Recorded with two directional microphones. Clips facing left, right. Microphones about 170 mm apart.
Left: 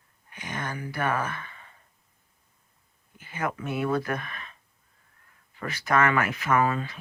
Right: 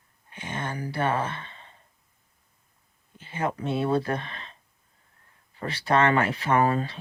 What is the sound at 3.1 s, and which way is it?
Speech, 25° right (ahead or behind).